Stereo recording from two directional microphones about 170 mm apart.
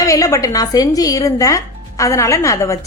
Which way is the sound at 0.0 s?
20° left (ahead or behind).